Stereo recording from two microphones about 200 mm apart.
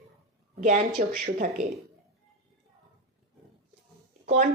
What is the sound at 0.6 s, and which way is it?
A woman's voice, 40° right (ahead or behind).